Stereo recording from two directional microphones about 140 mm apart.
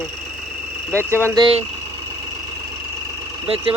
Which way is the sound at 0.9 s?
20° right (ahead or behind).